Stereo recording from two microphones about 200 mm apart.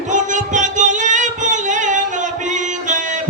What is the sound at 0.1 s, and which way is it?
Singing, 40° right (ahead or behind).